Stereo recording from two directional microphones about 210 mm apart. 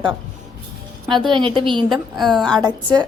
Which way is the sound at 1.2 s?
25° right (ahead or behind).